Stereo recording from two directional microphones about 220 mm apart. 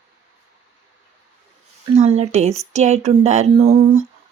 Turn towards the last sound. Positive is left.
turn(degrees=-30)  # may be behind; listen again after turning